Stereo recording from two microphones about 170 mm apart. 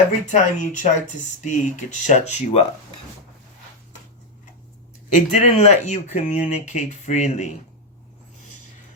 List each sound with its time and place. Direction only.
0.3 s speech: 45° left (ahead or behind)
5.1 s speech: 45° left (ahead or behind)